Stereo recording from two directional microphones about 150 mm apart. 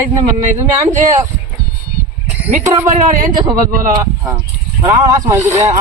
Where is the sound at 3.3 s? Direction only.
30° right (ahead or behind).